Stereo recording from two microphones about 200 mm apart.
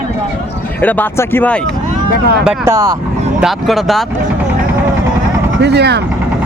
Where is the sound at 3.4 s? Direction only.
Centre (ahead or behind).